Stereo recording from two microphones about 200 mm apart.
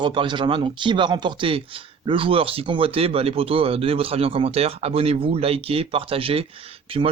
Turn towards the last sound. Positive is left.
turn(degrees=-25)  # may be behind; listen again after turning